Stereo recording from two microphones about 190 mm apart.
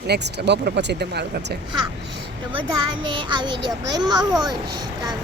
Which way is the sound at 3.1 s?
25° right (ahead or behind).